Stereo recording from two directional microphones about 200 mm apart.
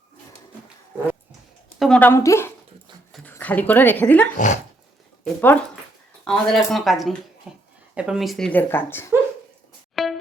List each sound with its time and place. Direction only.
1.8 s a woman's voice: 5° left (ahead or behind)
4.4 s speech: 40° left (ahead or behind)
5.2 s speech: 10° left (ahead or behind)
9.9 s music: centre (ahead or behind)